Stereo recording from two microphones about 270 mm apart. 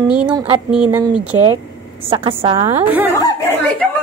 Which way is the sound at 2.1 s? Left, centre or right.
Centre.